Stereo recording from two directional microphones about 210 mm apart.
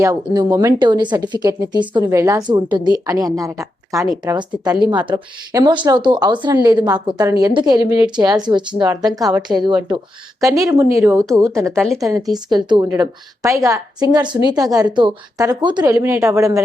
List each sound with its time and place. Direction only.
0.0 s a woman's voice: 15° right (ahead or behind)